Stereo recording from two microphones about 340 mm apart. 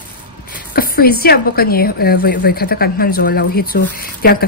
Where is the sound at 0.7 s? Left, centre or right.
Left.